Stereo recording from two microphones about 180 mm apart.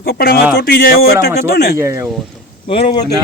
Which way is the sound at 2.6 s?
35° left (ahead or behind).